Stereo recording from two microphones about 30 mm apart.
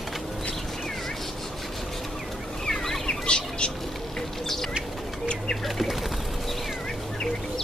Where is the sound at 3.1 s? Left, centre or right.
Left.